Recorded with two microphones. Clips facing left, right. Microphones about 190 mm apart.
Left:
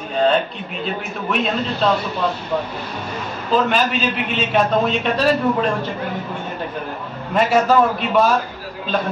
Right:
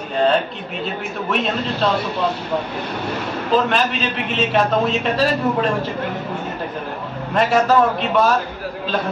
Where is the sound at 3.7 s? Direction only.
Centre (ahead or behind).